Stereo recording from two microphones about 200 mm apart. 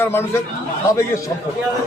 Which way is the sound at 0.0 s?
10° left (ahead or behind).